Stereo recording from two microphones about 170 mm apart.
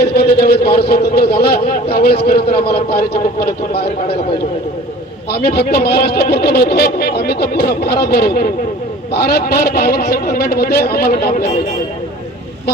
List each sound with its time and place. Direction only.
0.0 s a man's voice: 70° left (ahead or behind)
5.3 s a man's voice: 70° left (ahead or behind)